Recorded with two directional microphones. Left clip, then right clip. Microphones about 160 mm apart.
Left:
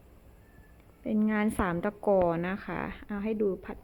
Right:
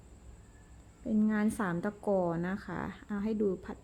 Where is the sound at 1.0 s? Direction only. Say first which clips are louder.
Left 3 dB; 5° left (ahead or behind).